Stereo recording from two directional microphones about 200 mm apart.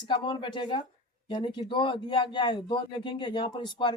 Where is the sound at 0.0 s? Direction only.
25° left (ahead or behind).